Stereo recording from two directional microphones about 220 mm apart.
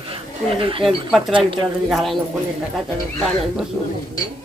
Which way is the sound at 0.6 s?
25° right (ahead or behind).